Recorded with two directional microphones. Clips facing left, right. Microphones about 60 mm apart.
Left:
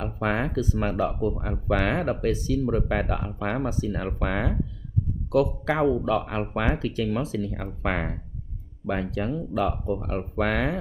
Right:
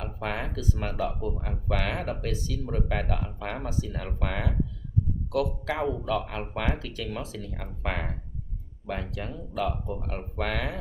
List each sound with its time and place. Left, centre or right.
0.0 s speech: left
8.9 s speech: left